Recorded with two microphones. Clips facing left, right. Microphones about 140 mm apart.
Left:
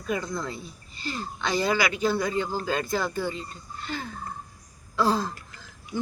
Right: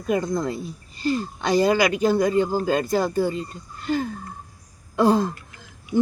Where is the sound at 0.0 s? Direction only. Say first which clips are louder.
Right 7 dB; 45° right (ahead or behind).